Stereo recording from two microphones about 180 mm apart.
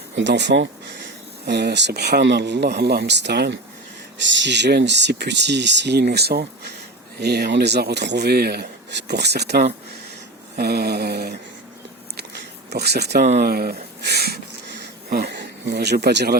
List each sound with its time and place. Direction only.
0.2 s speech: 75° right (ahead or behind)
1.5 s speech: 70° right (ahead or behind)
4.2 s speech: 85° right; by 11.3 s 60° right (ahead or behind)
12.7 s speech: 65° right (ahead or behind)
13.4 s a sound: 55° right (ahead or behind)